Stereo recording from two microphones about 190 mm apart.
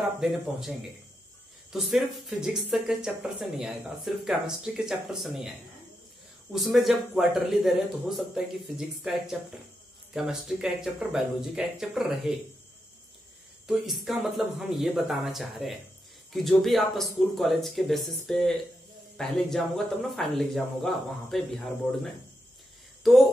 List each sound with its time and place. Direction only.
0.2 s speech: centre (ahead or behind)
6.5 s speech: centre (ahead or behind)
13.7 s speech: centre (ahead or behind)
23.0 s speech: centre (ahead or behind)